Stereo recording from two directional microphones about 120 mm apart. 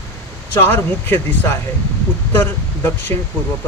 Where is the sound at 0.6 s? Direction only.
20° left (ahead or behind).